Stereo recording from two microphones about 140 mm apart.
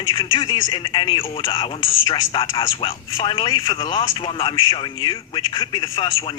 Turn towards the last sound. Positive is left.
turn(degrees=35)  # may be behind; listen again after turning